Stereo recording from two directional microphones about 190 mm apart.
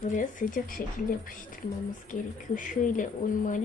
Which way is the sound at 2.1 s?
45° left (ahead or behind).